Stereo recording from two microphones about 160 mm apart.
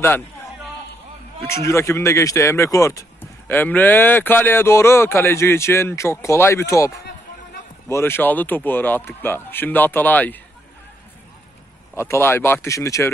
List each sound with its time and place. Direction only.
1.5 s speech: 15° left (ahead or behind)
7.9 s speech: 15° left (ahead or behind)
11.9 s speech: 15° left (ahead or behind)